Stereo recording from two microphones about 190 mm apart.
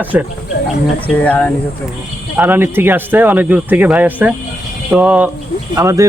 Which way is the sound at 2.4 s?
10° right (ahead or behind).